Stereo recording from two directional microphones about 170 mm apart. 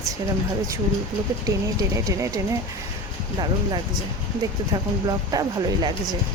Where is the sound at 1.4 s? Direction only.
20° right (ahead or behind).